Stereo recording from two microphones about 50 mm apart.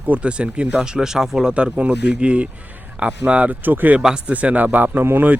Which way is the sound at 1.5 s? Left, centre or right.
Right.